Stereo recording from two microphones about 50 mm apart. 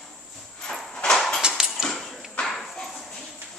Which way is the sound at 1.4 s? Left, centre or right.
Centre.